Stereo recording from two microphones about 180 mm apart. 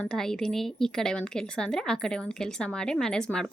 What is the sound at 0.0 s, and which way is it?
A woman's voice, 5° left (ahead or behind).